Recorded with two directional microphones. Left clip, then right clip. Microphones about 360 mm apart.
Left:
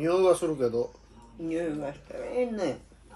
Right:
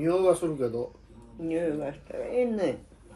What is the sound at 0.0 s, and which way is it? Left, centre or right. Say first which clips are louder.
Speech: left 1 dB; centre.